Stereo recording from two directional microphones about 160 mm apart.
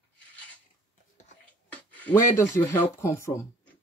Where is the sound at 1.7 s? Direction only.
10° left (ahead or behind).